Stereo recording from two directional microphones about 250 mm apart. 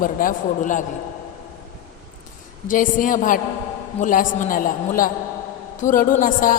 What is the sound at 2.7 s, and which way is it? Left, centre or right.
A woman's voice, left.